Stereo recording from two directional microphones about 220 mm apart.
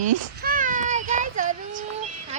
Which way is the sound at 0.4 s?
35° right (ahead or behind).